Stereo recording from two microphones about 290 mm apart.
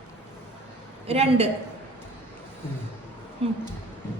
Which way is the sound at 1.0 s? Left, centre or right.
Right.